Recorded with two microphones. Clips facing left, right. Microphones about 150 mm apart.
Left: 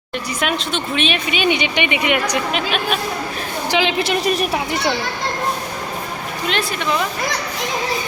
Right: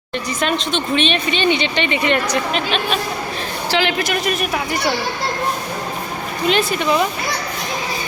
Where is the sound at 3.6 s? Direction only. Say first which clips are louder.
Left 1 dB; 20° left (ahead or behind).